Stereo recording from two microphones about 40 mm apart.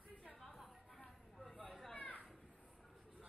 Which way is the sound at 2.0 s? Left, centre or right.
Left.